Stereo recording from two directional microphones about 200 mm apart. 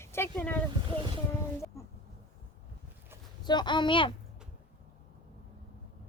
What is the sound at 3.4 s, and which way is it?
Speech, 20° left (ahead or behind).